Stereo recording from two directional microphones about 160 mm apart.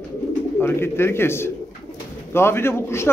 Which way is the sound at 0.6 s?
15° left (ahead or behind).